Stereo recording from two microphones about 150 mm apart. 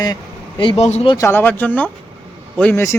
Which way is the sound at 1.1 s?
20° left (ahead or behind).